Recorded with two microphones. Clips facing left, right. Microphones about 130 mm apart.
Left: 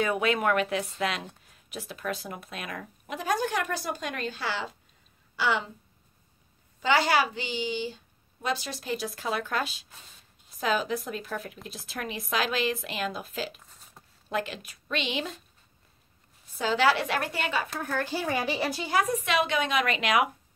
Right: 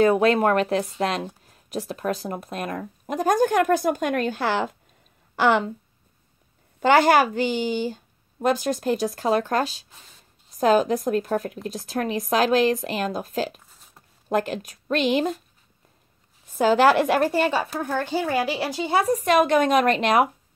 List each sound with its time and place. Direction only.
0.0 s a woman's voice: 35° right (ahead or behind); by 5.7 s 55° right (ahead or behind)
6.8 s a woman's voice: 50° right (ahead or behind)
16.5 s speech: 45° right (ahead or behind); by 18.0 s 30° right (ahead or behind)
18.2 s speech: 5° right (ahead or behind)
18.8 s speech: 30° right (ahead or behind)